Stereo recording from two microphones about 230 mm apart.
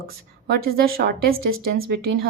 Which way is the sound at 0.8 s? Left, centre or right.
Right.